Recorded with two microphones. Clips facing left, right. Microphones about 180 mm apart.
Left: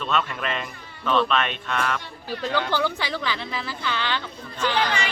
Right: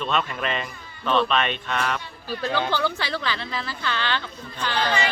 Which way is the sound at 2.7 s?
15° left (ahead or behind).